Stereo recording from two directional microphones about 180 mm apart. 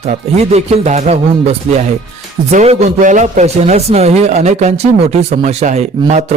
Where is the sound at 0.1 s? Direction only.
35° right (ahead or behind).